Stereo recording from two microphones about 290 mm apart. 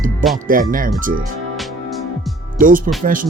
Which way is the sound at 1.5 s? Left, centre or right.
Centre.